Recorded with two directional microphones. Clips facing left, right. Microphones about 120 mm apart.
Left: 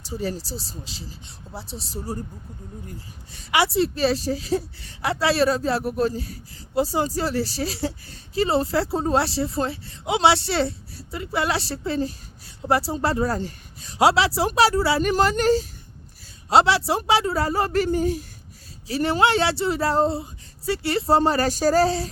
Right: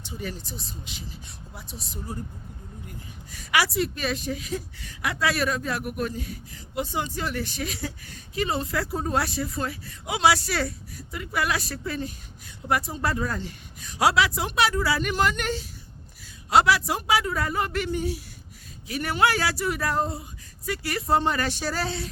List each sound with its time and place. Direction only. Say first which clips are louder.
0.0 s a woman's voice: left 6 dB; 35° left (ahead or behind)
3.3 s a woman's voice: left 4 dB; 25° left (ahead or behind); by 18.3 s 45° left (ahead or behind)
18.9 s a woman's voice: left 4 dB; 30° left (ahead or behind)